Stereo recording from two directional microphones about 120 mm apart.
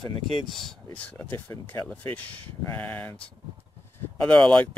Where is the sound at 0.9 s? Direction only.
15° left (ahead or behind).